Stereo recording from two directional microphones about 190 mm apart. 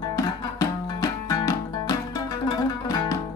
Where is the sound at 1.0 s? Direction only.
20° left (ahead or behind).